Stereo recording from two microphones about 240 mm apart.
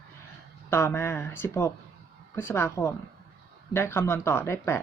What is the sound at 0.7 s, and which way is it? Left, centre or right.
Speech, centre.